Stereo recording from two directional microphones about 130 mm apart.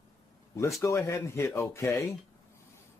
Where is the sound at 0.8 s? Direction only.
20° left (ahead or behind).